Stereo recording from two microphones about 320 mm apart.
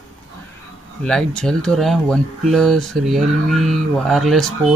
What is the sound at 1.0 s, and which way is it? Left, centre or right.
Speech, centre.